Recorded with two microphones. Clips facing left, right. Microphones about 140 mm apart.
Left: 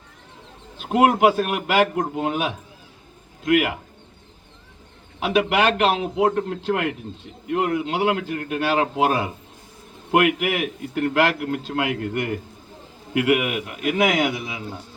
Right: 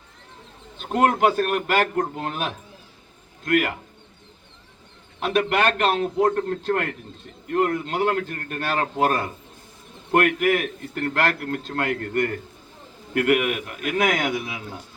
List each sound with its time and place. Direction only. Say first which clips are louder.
0.8 s a man's voice: left 3 dB; 5° left (ahead or behind)
5.2 s a man's voice: left 2 dB; 5° left (ahead or behind)